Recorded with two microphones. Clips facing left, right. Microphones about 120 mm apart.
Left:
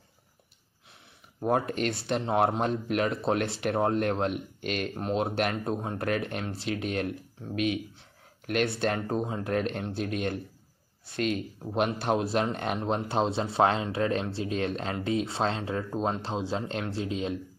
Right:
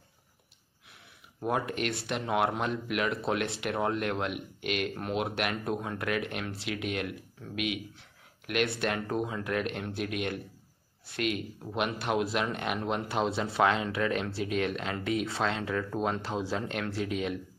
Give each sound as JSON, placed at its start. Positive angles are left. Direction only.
{"t": 1.4, "sound": "speech", "side_deg": 35}